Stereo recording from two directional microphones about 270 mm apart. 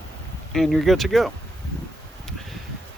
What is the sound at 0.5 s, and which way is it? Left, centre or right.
Speech, centre.